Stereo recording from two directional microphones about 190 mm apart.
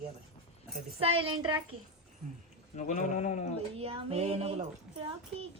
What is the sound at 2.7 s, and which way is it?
Speech, 40° left (ahead or behind).